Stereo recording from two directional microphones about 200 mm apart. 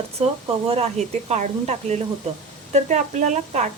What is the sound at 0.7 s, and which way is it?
A woman's voice, 35° right (ahead or behind).